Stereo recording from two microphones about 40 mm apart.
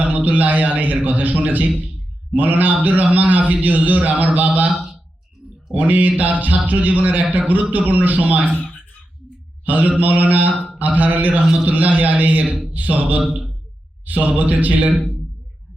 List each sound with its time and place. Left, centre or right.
0.3 s a man's voice: right
5.7 s a man's voice: right
9.6 s a man's voice: right